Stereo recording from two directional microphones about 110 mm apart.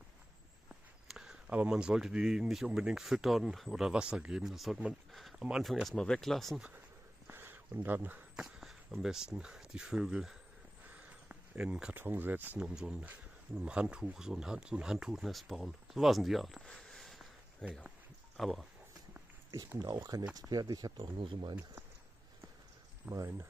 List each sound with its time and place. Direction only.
1.0 s speech: 5° right (ahead or behind)
7.2 s a sound: 20° right (ahead or behind)
8.4 s speech: 5° right (ahead or behind)
12.6 s speech: 5° right (ahead or behind)
19.8 s speech: 35° right (ahead or behind)
21.2 s speech: 50° right (ahead or behind)
23.0 s speech: 25° right (ahead or behind)